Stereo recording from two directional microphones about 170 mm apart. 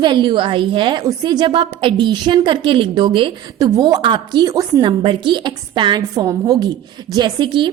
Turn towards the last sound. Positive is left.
turn(degrees=-25)  # may be behind; listen again after turning